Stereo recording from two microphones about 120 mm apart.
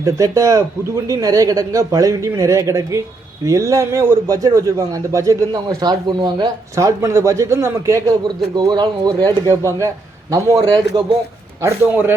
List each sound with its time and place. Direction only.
0.0 s a man's voice: 25° right (ahead or behind)
6.7 s a man's voice: 25° right (ahead or behind)
8.5 s a man's voice: 35° right (ahead or behind); by 12.1 s 15° right (ahead or behind)